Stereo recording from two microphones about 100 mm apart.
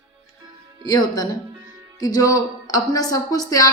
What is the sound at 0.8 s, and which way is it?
A woman's voice, 40° left (ahead or behind).